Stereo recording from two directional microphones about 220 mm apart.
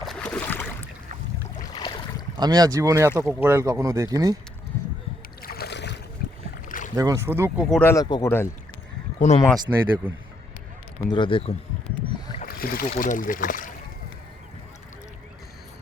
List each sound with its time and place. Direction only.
0.1 s boat: 5° left (ahead or behind)
1.7 s boat: 20° left (ahead or behind)
2.4 s speech: 20° right (ahead or behind)
5.4 s boat: 45° left (ahead or behind)
6.7 s rowboat: 35° left (ahead or behind)
6.9 s speech: 15° right (ahead or behind)
7.7 s speech: 10° left (ahead or behind)
9.1 s speech: 30° left (ahead or behind)
9.7 s speech: 10° right (ahead or behind)
11.1 s speech: 20° left (ahead or behind)
12.4 s speech: 40° left (ahead or behind)